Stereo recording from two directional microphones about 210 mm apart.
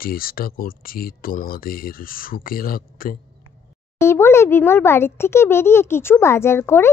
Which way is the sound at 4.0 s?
10° left (ahead or behind).